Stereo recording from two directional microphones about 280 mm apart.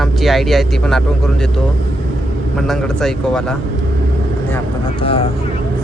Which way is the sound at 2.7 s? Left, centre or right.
Centre.